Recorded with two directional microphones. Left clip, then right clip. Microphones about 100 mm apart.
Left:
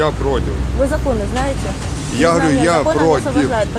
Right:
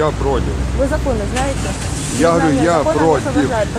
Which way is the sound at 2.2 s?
35° left (ahead or behind).